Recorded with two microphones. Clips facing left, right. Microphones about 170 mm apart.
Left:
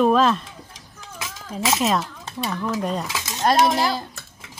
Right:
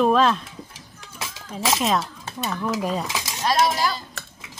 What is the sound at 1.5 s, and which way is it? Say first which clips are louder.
A woman's voice: left 1 dB; centre (ahead or behind).